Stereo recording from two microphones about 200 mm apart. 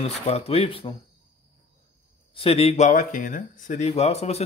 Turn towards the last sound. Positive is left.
turn(degrees=30)  # may be behind; listen again after turning